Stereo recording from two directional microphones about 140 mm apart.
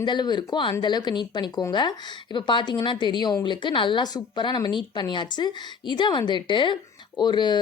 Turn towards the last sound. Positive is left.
turn(degrees=30)  # may be behind; listen again after turning